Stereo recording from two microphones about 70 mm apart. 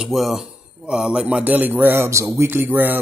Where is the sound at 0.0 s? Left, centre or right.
Centre; by 2.0 s right.